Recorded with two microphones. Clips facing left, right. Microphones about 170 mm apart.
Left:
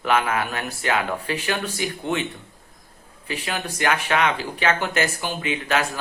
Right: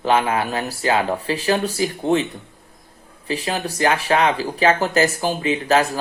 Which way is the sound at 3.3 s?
35° right (ahead or behind).